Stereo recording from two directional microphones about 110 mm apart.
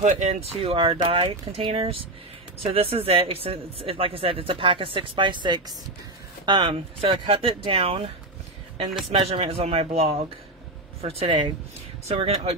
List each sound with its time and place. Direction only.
0.0 s speech: 85° right; by 8.1 s 60° right (ahead or behind)
9.1 s speech: 55° right (ahead or behind)
12.1 s speech: 70° right (ahead or behind)